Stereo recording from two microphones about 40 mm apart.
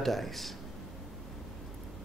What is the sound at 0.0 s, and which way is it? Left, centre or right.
Speech, centre.